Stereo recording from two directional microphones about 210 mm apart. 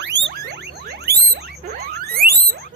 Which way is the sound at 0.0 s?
55° right (ahead or behind).